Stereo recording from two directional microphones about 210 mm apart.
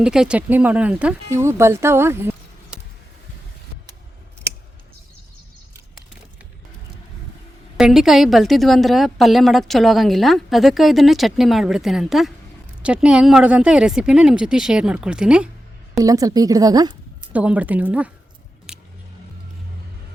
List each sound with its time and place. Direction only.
0.0 s speech: 5° right (ahead or behind)
7.8 s a woman's voice: centre (ahead or behind)
16.0 s speech: 15° right (ahead or behind)
17.3 s speech: 5° right (ahead or behind)